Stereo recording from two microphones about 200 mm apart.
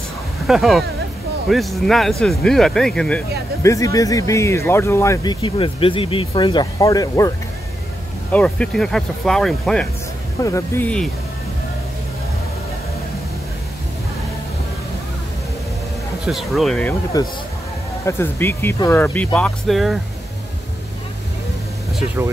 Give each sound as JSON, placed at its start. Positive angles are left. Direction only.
{"t": 0.5, "sound": "speech", "side_deg": 0}
{"t": 8.3, "sound": "speech", "side_deg": 5}
{"t": 10.4, "sound": "speech", "side_deg": 15}
{"t": 16.3, "sound": "speech", "side_deg": 0}
{"t": 17.1, "sound": "speech", "side_deg": 20}